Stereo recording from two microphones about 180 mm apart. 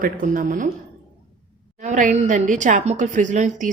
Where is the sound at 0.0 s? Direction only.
45° right (ahead or behind).